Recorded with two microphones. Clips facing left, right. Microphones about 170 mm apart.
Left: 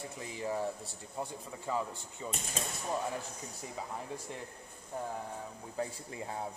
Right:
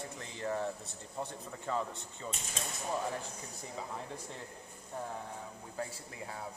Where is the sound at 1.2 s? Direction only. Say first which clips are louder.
Left 1 dB; 5° left (ahead or behind).